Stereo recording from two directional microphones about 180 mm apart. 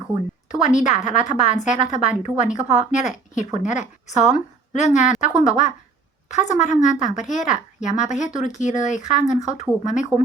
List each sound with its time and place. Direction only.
0.6 s a woman's voice: 40° left (ahead or behind)